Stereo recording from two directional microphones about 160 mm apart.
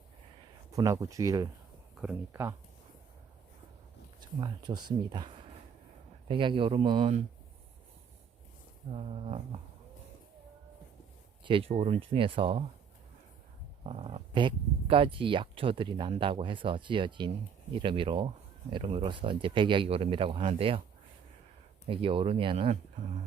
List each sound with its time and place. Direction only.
0.7 s speech: 20° right (ahead or behind)
4.2 s speech: 25° right (ahead or behind)
8.9 s speech: 40° right (ahead or behind)
11.4 s speech: 35° right (ahead or behind)
11.7 s speech: 45° right (ahead or behind)
13.8 s speech: 35° right (ahead or behind)
21.8 s speech: 35° right (ahead or behind)